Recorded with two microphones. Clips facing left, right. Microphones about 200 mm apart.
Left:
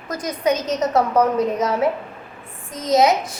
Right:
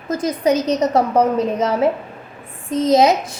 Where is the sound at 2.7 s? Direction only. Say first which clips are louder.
Right 3 dB; 30° right (ahead or behind).